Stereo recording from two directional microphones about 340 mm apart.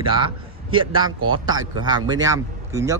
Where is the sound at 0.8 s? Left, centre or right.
Right.